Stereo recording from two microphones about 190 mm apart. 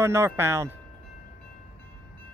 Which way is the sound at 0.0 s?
15° right (ahead or behind).